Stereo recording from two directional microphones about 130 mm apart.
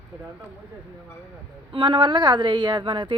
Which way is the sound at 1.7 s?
35° right (ahead or behind).